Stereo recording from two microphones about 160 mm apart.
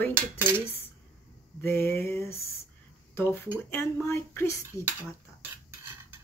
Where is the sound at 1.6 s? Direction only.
15° left (ahead or behind).